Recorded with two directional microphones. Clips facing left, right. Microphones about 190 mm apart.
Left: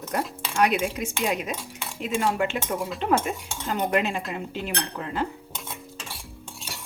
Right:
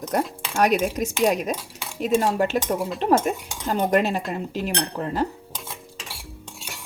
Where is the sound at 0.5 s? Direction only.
40° right (ahead or behind).